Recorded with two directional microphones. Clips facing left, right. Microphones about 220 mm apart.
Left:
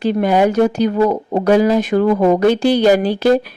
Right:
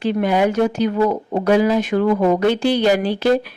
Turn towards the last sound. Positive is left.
turn(degrees=40)  # may be behind; listen again after turning